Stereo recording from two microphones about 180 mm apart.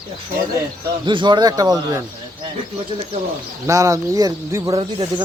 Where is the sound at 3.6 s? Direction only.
15° right (ahead or behind).